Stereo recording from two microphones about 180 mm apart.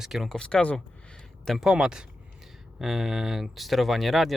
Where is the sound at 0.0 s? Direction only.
Centre (ahead or behind).